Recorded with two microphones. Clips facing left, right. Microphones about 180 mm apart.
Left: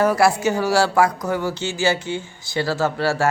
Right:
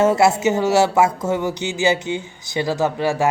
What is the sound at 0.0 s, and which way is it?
Speech, 25° right (ahead or behind).